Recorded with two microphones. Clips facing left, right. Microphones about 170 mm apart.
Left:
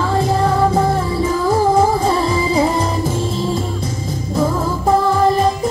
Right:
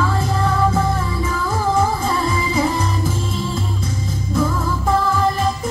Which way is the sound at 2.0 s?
30° left (ahead or behind).